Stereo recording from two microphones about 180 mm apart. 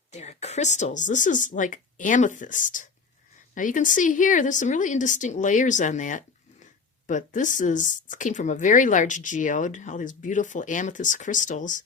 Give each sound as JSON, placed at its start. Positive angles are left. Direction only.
{"t": 0.1, "sound": "a woman's voice", "side_deg": 40}